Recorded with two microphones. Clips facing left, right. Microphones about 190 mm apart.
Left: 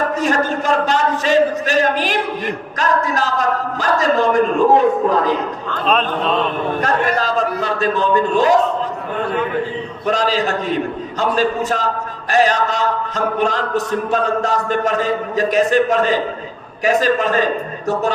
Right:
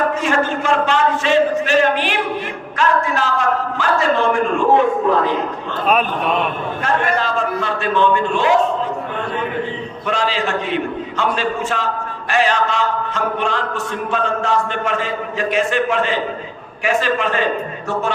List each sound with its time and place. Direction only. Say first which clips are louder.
0.2 s a man's voice: left 1 dB; 40° left (ahead or behind)
5.8 s a man's voice: even; 10° right (ahead or behind)
6.8 s a man's voice: right 1 dB; 40° left (ahead or behind)
10.1 s a man's voice: left 2 dB; 40° left (ahead or behind)